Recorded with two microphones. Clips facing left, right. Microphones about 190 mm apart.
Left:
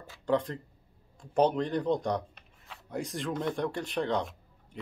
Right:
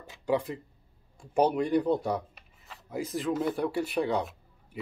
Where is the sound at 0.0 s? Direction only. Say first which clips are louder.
Even; 15° right (ahead or behind).